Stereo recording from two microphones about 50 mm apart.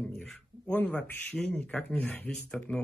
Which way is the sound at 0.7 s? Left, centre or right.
Left.